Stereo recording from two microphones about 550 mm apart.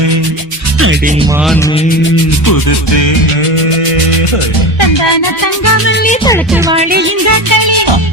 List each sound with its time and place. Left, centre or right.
0.8 s speech: centre
2.5 s music: left
4.8 s music: left
5.6 s music: left; by 6.6 s centre
6.7 s speech: centre
7.3 s music: right